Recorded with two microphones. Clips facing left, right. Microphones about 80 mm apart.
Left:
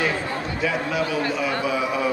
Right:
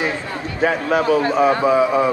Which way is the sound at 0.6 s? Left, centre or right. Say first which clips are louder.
Right 8 dB; right.